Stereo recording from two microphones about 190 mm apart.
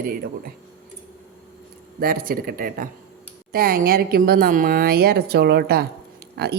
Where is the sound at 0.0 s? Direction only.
50° right (ahead or behind).